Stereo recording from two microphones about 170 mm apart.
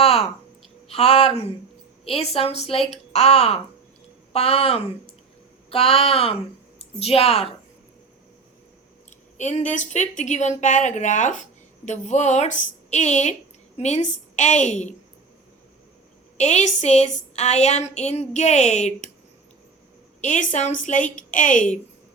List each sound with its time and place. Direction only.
0.0 s a sound: 35° left (ahead or behind)
0.9 s a woman's voice: 35° left (ahead or behind)
9.4 s a woman's voice: 45° left (ahead or behind)
16.4 s a woman's voice: 40° left (ahead or behind)
20.2 s a woman's voice: 45° left (ahead or behind)